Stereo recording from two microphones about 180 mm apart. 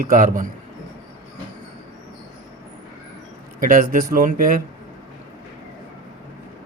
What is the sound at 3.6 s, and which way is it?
A man's voice, 50° right (ahead or behind).